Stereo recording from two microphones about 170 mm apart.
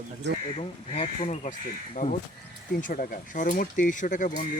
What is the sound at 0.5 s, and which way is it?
Speech, 40° left (ahead or behind).